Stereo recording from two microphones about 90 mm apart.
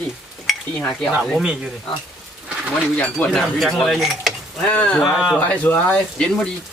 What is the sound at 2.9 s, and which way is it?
Speech, 20° left (ahead or behind).